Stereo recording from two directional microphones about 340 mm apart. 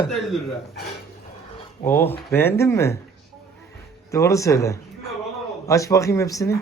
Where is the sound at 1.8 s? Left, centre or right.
Centre.